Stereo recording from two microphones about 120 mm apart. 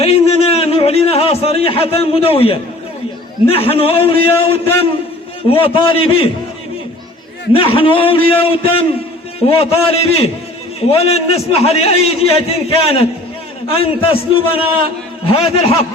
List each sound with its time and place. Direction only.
0.0 s a sound: 55° left (ahead or behind)
3.4 s a man's voice: 55° left (ahead or behind)
7.5 s a man's voice: 50° left (ahead or behind)